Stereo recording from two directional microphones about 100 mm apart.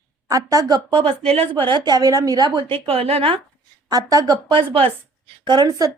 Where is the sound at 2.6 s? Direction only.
60° right (ahead or behind).